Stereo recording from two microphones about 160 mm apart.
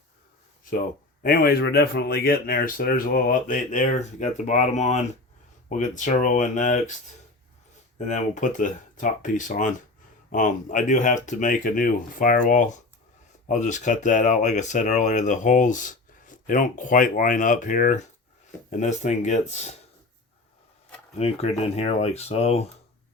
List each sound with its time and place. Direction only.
1.2 s speech: 65° left (ahead or behind); by 6.9 s 50° left (ahead or behind)
7.9 s speech: 50° left (ahead or behind)
21.2 s speech: 40° left (ahead or behind)